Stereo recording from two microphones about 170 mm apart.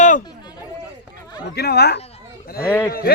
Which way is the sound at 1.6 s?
70° left (ahead or behind).